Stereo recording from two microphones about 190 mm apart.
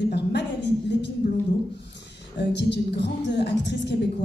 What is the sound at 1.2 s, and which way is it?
Speech, 60° left (ahead or behind).